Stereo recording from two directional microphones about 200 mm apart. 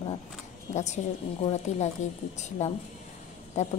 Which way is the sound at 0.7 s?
35° left (ahead or behind).